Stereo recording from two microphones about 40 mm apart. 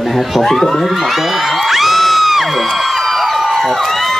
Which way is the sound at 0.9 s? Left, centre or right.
Centre.